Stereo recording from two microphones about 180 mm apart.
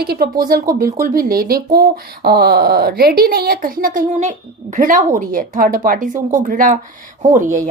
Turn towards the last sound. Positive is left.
turn(degrees=-45)  # may be behind; listen again after turning